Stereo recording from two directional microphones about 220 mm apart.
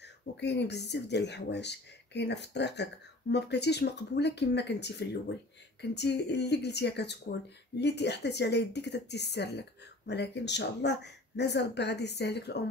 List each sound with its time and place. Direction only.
0.0 s speech: 50° left (ahead or behind)